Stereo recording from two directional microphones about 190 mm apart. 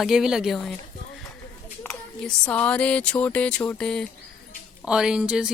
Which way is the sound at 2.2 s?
5° left (ahead or behind).